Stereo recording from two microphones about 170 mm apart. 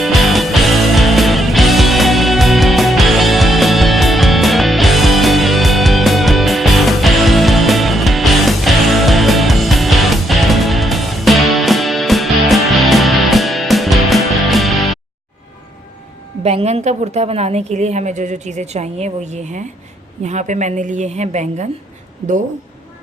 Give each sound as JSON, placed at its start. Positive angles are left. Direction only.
{"t": 0.0, "sound": "music", "side_deg": 0}
{"t": 16.4, "sound": "a woman's voice", "side_deg": -35}